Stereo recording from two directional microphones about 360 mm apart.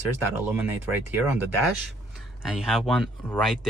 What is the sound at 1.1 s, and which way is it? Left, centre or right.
Speech, centre.